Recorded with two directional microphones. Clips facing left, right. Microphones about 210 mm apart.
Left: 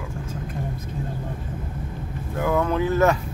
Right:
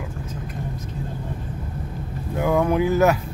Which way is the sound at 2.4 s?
15° right (ahead or behind).